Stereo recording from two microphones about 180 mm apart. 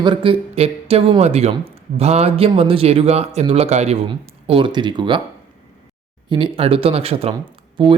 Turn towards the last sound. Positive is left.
turn(degrees=-25)  # may be behind; listen again after turning